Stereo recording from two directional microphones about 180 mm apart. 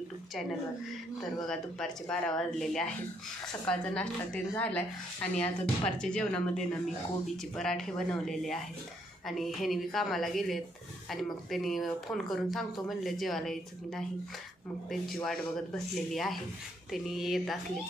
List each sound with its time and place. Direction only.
1.5 s speech: 5° left (ahead or behind)